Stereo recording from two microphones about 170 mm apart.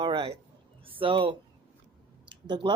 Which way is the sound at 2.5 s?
25° right (ahead or behind).